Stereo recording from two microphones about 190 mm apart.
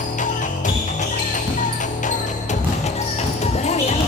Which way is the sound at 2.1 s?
40° left (ahead or behind).